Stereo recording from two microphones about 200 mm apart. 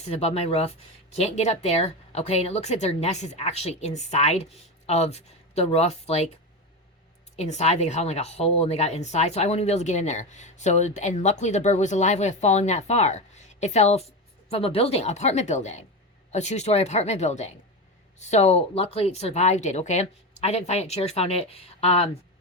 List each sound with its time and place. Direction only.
0.0 s a woman's voice: 30° left (ahead or behind)
7.3 s a woman's voice: 35° left (ahead or behind)